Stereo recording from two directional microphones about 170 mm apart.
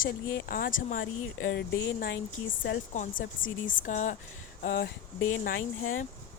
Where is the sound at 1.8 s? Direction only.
80° left.